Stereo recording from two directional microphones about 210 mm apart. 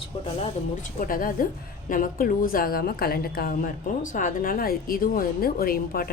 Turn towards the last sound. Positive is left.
turn(degrees=45)  # may be behind; listen again after turning